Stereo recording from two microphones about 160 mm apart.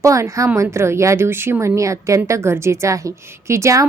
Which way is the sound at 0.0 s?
20° right (ahead or behind).